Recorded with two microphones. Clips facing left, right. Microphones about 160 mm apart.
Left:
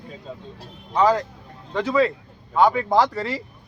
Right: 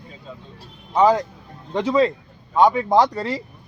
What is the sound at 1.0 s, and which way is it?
Speech, 15° right (ahead or behind).